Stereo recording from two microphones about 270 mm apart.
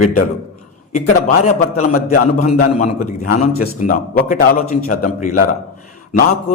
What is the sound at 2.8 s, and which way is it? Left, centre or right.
A man's voice, left.